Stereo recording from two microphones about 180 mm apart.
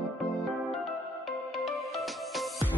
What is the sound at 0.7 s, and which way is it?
Music, centre (ahead or behind).